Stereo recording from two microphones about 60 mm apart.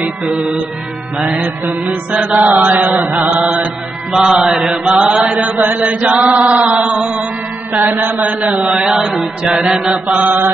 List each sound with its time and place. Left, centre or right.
1.1 s chant: centre
1.6 s chant: right
4.1 s chant: centre
7.7 s chant: right
8.7 s chant: centre
9.0 s mantra: centre
9.4 s chant: centre
10.1 s chant: right